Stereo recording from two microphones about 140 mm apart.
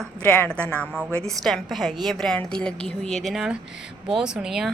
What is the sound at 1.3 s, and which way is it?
A woman's voice, centre (ahead or behind).